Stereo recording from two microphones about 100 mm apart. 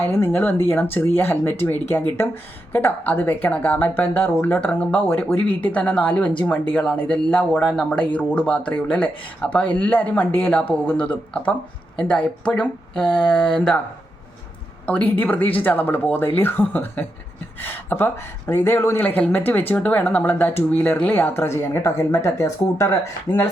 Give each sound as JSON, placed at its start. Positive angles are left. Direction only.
{"t": 0.0, "sound": "a woman's voice", "side_deg": 20}
{"t": 14.8, "sound": "a woman's voice", "side_deg": 15}